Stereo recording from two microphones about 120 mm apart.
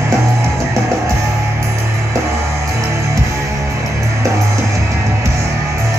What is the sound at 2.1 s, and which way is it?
Music, 25° right (ahead or behind).